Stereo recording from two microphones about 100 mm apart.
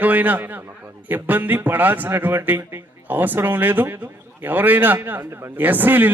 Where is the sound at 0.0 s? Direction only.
15° right (ahead or behind).